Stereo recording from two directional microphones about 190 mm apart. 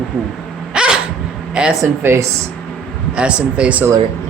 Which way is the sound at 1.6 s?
10° right (ahead or behind).